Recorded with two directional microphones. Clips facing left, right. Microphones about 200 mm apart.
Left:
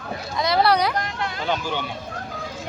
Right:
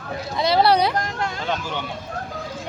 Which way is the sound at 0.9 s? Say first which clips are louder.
Right 2 dB; 45° right (ahead or behind).